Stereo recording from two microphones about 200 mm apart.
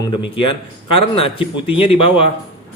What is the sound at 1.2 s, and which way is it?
Speech, 25° left (ahead or behind).